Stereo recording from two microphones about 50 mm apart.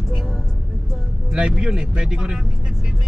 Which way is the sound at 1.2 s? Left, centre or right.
Centre.